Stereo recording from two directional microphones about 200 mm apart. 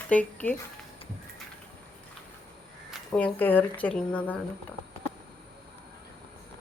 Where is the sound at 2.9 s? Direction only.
5° left (ahead or behind).